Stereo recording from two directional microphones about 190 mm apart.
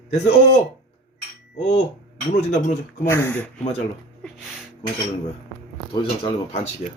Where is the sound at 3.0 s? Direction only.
10° left (ahead or behind).